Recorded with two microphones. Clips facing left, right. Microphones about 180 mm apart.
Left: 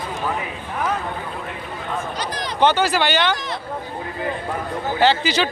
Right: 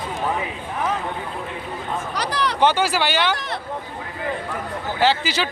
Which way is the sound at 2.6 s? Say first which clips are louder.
Left 2 dB; 10° right (ahead or behind).